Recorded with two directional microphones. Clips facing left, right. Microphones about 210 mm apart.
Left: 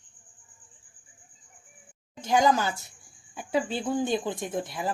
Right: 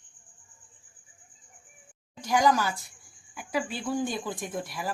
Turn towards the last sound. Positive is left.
turn(degrees=25)  # may be behind; listen again after turning